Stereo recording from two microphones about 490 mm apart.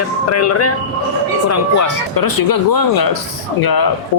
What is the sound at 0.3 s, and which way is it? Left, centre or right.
Speech, left.